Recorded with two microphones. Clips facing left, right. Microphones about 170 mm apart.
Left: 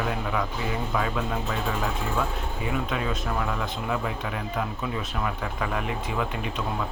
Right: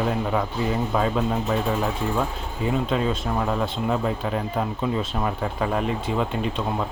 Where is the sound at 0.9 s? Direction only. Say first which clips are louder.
Right 4 dB; 30° right (ahead or behind).